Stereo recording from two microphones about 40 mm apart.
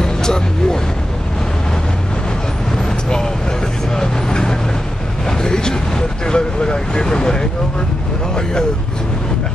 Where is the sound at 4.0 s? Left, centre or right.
Centre.